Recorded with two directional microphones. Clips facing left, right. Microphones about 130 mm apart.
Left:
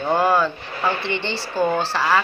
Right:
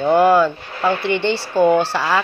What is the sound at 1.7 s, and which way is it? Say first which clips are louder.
Speech: right 3 dB; 15° right (ahead or behind).